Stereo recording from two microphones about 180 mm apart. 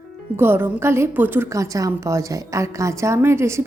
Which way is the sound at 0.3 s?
10° right (ahead or behind).